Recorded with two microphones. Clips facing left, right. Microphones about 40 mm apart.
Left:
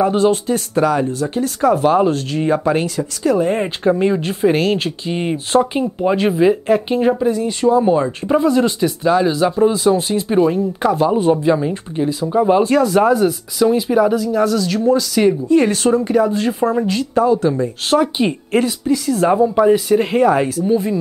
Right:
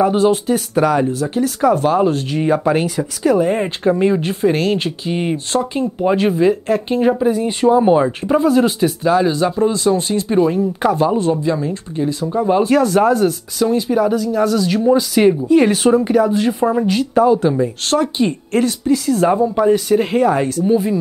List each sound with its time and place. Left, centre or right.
0.0 s speech: centre
2.1 s speech: centre
5.5 s speech: centre
6.0 s speech: centre
7.4 s speech: right
8.3 s speech: centre
11.1 s speech: centre
12.6 s speech: centre
17.8 s speech: centre